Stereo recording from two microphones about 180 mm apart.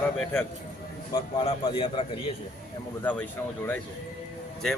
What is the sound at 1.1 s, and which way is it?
A man's voice, 25° left (ahead or behind).